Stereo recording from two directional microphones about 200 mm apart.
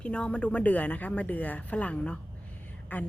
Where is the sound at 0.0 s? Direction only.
5° left (ahead or behind).